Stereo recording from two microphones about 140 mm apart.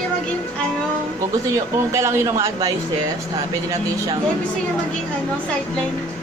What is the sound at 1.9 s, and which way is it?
Speech, 20° right (ahead or behind).